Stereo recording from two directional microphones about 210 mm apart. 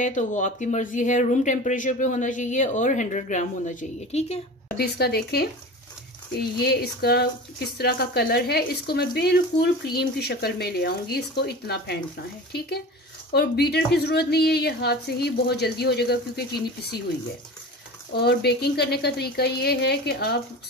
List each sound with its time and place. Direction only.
0.0 s speech: 35° left (ahead or behind)
4.7 s speech: 50° left (ahead or behind)
18.1 s speech: 50° left (ahead or behind)